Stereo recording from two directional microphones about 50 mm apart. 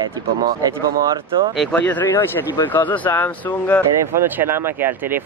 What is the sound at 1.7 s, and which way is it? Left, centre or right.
Speech, left.